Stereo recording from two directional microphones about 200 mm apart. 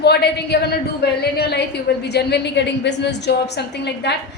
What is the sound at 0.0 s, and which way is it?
A woman's voice, 55° left (ahead or behind).